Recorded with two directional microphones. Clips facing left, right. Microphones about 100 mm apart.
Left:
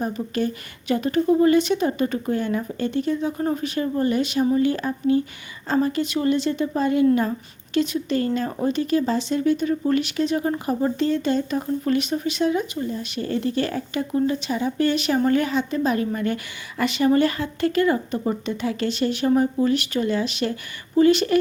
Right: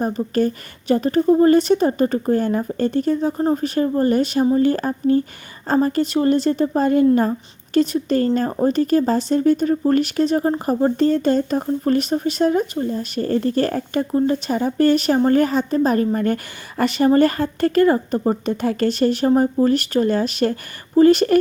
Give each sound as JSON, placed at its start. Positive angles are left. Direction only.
{"t": 0.0, "sound": "a woman's voice", "side_deg": -40}